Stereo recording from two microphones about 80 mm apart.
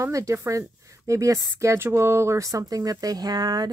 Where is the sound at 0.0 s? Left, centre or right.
Right.